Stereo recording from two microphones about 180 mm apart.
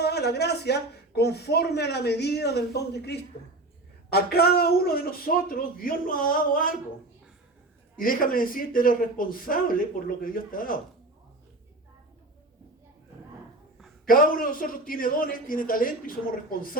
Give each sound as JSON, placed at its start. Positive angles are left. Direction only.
{"t": 0.0, "sound": "a man's voice", "side_deg": 65}
{"t": 7.9, "sound": "a man's voice", "side_deg": 50}
{"t": 14.1, "sound": "a man's voice", "side_deg": 50}